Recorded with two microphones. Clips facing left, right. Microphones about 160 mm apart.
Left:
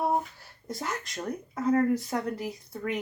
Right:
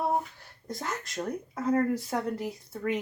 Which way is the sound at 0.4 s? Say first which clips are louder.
Left 1 dB; centre (ahead or behind).